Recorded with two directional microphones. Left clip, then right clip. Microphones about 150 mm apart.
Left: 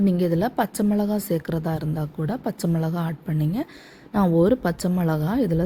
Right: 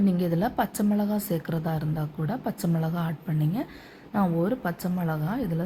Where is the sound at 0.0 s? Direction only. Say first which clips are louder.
Left 4 dB; 45° left (ahead or behind).